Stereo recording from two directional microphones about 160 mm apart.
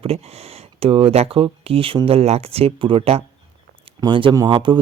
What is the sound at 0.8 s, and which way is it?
Speech, 35° right (ahead or behind).